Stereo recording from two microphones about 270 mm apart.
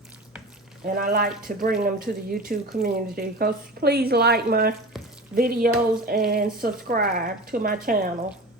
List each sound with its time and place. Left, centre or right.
0.9 s a woman's voice: right
4.9 s frying: centre
5.3 s a woman's voice: right